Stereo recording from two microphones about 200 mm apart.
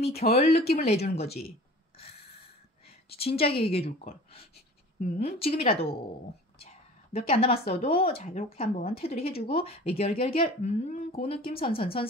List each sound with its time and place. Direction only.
0.3 s speech: 30° left (ahead or behind)
3.1 s a woman's voice: 30° left (ahead or behind)
5.0 s a woman's voice: 30° left (ahead or behind)